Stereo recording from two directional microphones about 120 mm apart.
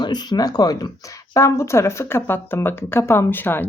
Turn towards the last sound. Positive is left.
turn(degrees=15)  # may be behind; listen again after turning